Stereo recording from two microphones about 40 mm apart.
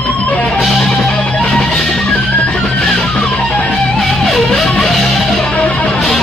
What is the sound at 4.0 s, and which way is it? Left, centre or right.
Music, centre.